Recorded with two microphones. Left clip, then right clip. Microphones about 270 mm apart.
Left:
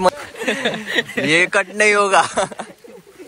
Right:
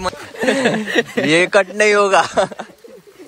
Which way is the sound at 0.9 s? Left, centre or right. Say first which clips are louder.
Right 3 dB; right.